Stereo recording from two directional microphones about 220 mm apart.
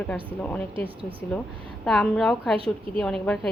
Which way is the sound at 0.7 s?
25° right (ahead or behind).